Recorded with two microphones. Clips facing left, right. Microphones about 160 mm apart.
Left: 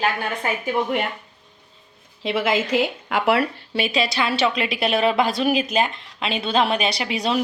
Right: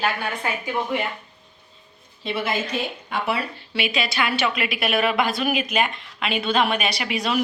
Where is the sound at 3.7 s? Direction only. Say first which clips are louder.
Left 2 dB; 35° left (ahead or behind).